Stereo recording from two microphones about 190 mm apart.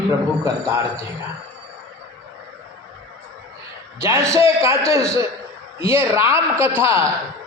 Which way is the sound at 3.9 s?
15° right (ahead or behind).